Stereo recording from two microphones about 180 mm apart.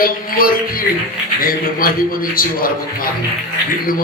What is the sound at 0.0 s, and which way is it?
Speech, 50° left (ahead or behind).